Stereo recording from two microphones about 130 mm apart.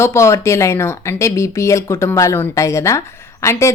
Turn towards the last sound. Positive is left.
turn(degrees=20)  # may be behind; listen again after turning